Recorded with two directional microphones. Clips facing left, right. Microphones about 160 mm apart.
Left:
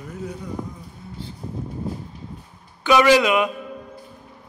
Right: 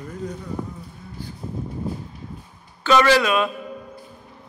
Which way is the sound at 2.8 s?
15° left (ahead or behind).